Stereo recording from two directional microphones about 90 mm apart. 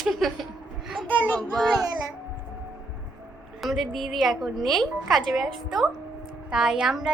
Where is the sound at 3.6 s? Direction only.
Centre (ahead or behind).